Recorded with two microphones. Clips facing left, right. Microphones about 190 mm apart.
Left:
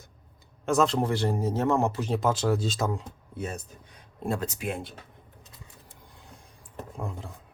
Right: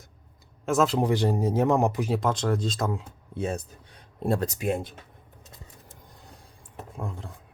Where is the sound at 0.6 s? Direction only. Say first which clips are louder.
Right 1 dB; centre (ahead or behind).